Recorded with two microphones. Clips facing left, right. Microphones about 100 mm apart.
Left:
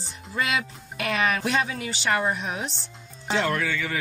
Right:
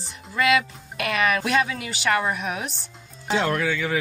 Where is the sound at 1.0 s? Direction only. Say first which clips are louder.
Right 2 dB; 30° left (ahead or behind).